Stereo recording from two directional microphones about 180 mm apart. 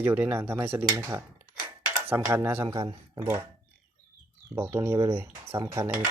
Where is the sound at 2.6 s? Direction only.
25° right (ahead or behind).